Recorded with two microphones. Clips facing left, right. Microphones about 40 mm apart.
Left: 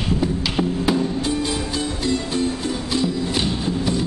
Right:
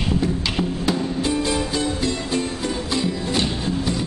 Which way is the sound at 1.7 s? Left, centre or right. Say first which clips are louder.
Even; centre.